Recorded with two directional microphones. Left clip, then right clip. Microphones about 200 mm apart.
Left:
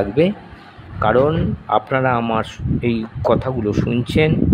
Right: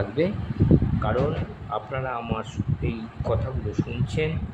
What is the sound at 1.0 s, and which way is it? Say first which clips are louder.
Speech: left 11 dB; 40° left (ahead or behind).